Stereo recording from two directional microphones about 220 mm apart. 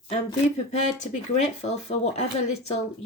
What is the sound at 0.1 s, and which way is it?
Speech, 30° left (ahead or behind).